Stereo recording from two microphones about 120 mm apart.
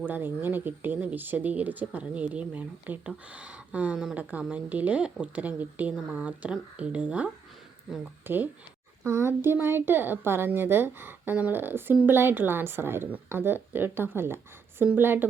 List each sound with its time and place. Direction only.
0.1 s speech: 15° right (ahead or behind)
8.3 s speech: 15° right (ahead or behind)